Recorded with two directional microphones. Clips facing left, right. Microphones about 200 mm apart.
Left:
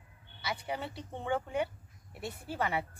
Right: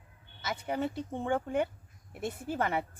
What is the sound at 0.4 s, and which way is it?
Speech, 50° right (ahead or behind).